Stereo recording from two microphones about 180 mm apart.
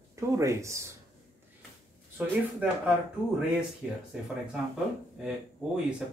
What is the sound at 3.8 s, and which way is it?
Speech, 5° right (ahead or behind).